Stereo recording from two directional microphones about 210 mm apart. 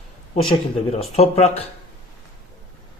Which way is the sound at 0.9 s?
30° left (ahead or behind).